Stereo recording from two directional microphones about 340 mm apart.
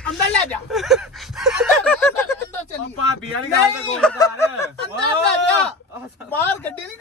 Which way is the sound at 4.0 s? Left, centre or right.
Centre.